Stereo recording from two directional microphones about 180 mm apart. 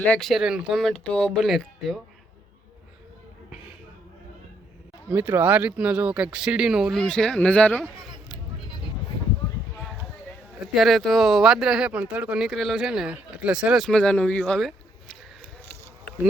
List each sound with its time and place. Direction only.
0.0 s speech: 5° left (ahead or behind)
5.0 s speech: 10° right (ahead or behind); by 7.9 s 5° left (ahead or behind)
10.8 s speech: centre (ahead or behind)